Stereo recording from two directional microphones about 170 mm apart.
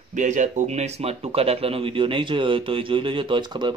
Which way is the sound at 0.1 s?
45° right (ahead or behind).